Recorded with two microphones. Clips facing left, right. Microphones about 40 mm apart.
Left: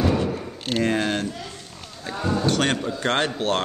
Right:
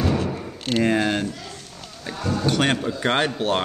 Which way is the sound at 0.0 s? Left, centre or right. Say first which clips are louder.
Left 1 dB; centre.